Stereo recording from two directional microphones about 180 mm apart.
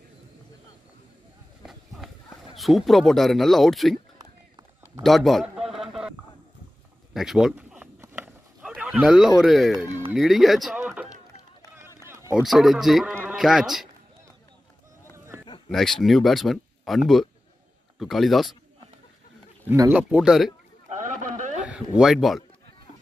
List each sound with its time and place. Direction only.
1.7 s run: centre (ahead or behind)
2.5 s speech: centre (ahead or behind)
5.0 s a man's voice: centre (ahead or behind)
5.8 s a sound: 5° right (ahead or behind)
7.2 s a sound: centre (ahead or behind)
9.4 s speech: centre (ahead or behind)
12.0 s run: 15° right (ahead or behind)
12.4 s a man's voice: centre (ahead or behind)
15.1 s a sound: 15° right (ahead or behind)
15.7 s speech: centre (ahead or behind)
19.7 s speech: 10° right (ahead or behind)
20.9 s a sound: 45° right (ahead or behind)
21.6 s speech: 5° right (ahead or behind)